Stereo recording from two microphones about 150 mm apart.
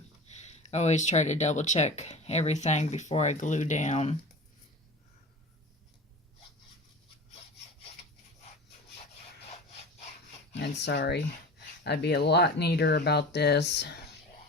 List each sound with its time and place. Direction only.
0.3 s speech: 50° left (ahead or behind)
10.9 s speech: 90° left